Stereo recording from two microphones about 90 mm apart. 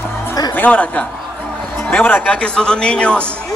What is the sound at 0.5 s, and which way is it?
Speech, 15° left (ahead or behind).